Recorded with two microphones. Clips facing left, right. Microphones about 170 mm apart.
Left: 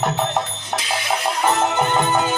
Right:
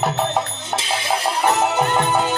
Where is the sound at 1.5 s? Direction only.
10° right (ahead or behind).